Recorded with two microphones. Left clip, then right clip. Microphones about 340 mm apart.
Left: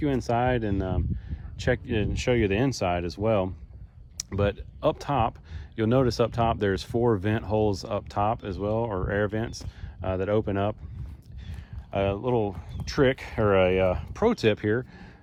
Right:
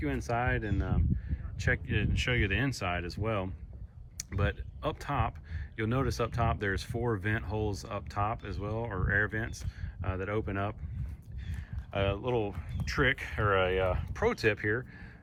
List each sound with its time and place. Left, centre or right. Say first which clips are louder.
0.0 s speech: left 7 dB; centre
11.9 s speech: left 5 dB; centre
12.2 s speech: left 6 dB; left
12.8 s speech: left 5 dB; centre